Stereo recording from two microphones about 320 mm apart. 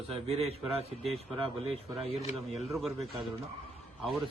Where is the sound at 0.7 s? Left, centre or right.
Centre.